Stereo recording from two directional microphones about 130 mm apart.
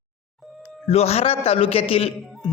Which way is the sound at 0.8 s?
50° left (ahead or behind).